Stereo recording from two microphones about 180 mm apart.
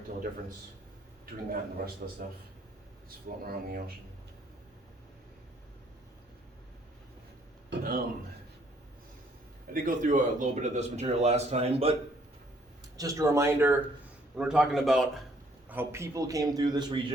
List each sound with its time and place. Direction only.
1.5 s a man's voice: 55° right (ahead or behind)
3.2 s speech: 55° right (ahead or behind)
7.7 s speech: 50° right (ahead or behind)
9.7 s speech: 50° right (ahead or behind)
13.0 s a man's voice: 20° right (ahead or behind); by 15.0 s centre (ahead or behind)
15.7 s a man's voice: 15° right (ahead or behind)